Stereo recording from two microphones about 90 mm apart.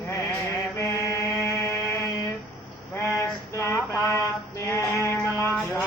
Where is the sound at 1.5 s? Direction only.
25° left (ahead or behind).